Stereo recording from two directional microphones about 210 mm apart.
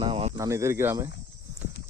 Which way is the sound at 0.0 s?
25° right (ahead or behind).